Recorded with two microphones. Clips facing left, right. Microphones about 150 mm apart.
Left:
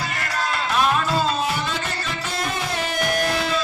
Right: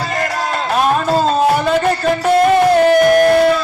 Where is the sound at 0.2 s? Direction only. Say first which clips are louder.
Right 6 dB; 40° right (ahead or behind).